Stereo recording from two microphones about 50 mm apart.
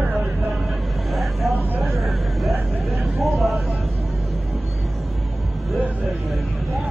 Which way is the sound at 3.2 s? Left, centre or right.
Centre.